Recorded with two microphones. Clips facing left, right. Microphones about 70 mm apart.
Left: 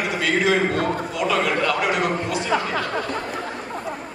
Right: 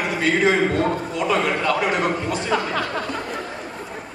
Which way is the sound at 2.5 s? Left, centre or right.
Centre.